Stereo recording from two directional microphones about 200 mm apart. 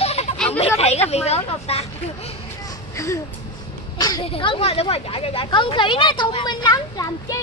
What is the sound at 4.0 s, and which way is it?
Speech, 20° left (ahead or behind).